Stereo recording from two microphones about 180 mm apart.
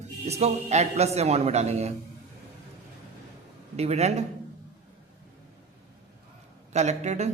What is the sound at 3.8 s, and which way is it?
Speech, 35° right (ahead or behind).